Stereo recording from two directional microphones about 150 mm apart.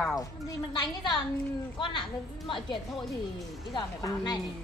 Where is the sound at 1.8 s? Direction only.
35° left (ahead or behind).